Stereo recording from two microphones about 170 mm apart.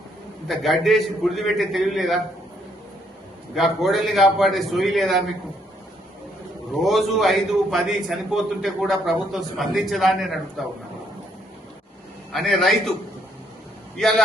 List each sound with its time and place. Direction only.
0.4 s a man's voice: centre (ahead or behind)
3.5 s a man's voice: centre (ahead or behind)
6.8 s a man's voice: centre (ahead or behind)
12.3 s a man's voice: centre (ahead or behind)
13.9 s speech: centre (ahead or behind)